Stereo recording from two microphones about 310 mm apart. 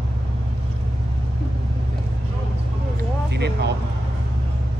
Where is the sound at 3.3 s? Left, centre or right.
Right.